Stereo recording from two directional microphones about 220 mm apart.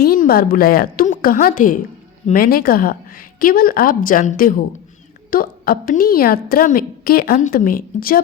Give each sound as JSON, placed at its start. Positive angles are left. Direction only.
{"t": 0.0, "sound": "a woman's voice", "side_deg": 40}